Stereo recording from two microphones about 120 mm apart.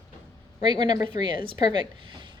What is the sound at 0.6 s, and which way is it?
A woman's voice, 40° right (ahead or behind).